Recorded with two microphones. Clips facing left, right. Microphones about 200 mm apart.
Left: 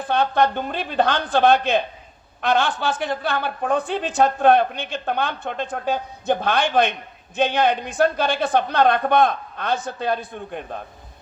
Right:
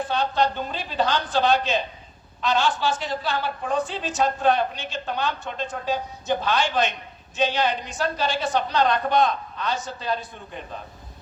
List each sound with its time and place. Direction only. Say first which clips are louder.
0.1 s a woman's voice: left 6 dB; 55° left (ahead or behind)